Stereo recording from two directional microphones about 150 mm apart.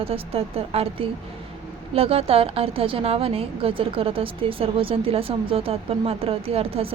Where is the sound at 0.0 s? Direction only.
40° right (ahead or behind).